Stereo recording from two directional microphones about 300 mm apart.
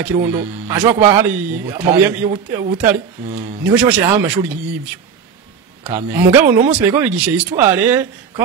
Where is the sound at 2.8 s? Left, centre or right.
Right.